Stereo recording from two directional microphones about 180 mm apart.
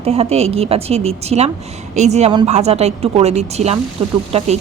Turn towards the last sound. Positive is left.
turn(degrees=-35)  # may be behind; listen again after turning